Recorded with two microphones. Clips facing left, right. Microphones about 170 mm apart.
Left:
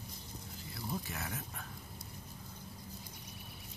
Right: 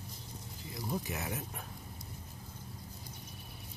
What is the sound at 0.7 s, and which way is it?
Speech, 15° right (ahead or behind).